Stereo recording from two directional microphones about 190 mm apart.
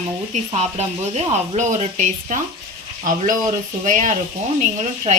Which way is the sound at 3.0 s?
45° right (ahead or behind).